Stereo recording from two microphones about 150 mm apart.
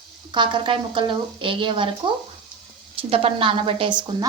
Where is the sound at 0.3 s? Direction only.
30° right (ahead or behind).